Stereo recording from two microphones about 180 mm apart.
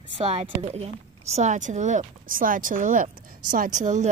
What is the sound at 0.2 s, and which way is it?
Speech, 35° right (ahead or behind).